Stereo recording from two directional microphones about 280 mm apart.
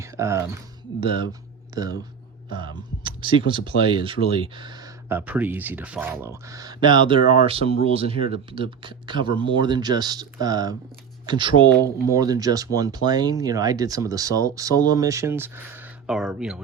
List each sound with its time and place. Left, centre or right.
0.0 s speech: centre